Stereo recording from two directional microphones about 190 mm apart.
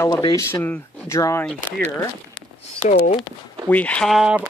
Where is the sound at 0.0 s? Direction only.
20° left (ahead or behind).